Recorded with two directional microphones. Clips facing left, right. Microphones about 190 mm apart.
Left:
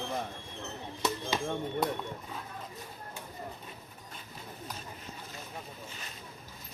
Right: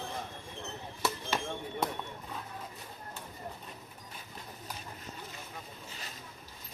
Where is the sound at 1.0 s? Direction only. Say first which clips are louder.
Left 2 dB; 15° left (ahead or behind).